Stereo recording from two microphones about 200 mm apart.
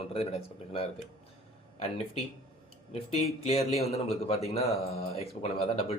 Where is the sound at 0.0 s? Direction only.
30° left (ahead or behind).